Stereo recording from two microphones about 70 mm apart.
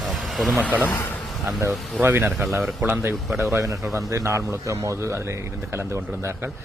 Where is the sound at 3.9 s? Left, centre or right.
Right.